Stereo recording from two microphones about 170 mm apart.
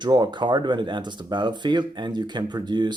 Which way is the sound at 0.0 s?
25° right (ahead or behind).